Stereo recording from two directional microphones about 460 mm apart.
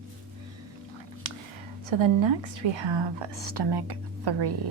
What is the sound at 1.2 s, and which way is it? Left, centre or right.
Whispering, right.